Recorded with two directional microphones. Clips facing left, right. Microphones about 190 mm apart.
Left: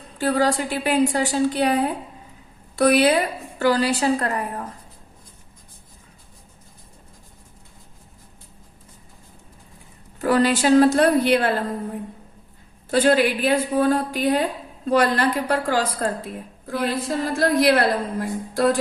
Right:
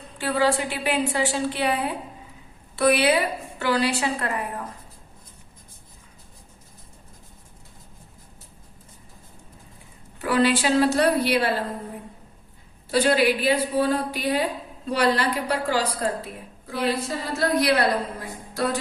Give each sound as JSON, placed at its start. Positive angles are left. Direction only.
{"t": 0.2, "sound": "a woman's voice", "side_deg": 40}
{"t": 10.2, "sound": "a woman's voice", "side_deg": 45}
{"t": 12.9, "sound": "a woman's voice", "side_deg": 50}